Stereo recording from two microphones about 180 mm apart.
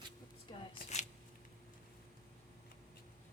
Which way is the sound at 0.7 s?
40° left (ahead or behind).